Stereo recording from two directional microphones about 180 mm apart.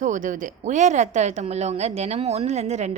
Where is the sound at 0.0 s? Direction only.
45° right (ahead or behind).